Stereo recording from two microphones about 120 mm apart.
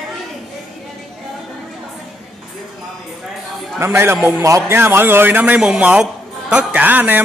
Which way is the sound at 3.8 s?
20° right (ahead or behind).